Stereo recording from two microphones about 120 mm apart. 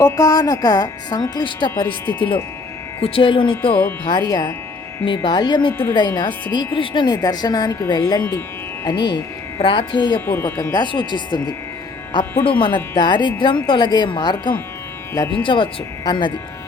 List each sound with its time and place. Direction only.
0.0 s speech: 30° left (ahead or behind); by 3.8 s 45° left (ahead or behind)
4.0 s speech: 35° left (ahead or behind)
10.2 s speech: 20° left (ahead or behind)
10.7 s speech: 35° left (ahead or behind)